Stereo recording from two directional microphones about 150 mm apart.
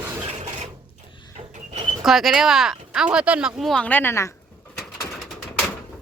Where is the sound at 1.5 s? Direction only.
50° right (ahead or behind).